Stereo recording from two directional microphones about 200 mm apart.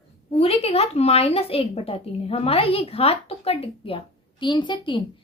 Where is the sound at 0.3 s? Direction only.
30° left (ahead or behind).